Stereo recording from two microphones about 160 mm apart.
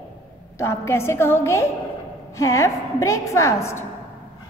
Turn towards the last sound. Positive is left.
turn(degrees=15)  # may be behind; listen again after turning